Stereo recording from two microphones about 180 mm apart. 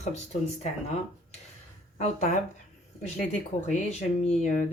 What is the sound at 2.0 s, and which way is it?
Speech, 40° left (ahead or behind).